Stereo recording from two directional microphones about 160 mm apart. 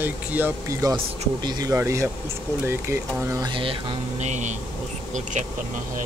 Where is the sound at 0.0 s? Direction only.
10° right (ahead or behind).